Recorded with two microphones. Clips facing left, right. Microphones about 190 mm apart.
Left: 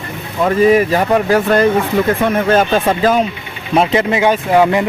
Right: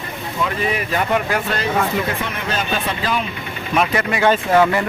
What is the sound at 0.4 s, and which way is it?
Speech, 40° left (ahead or behind).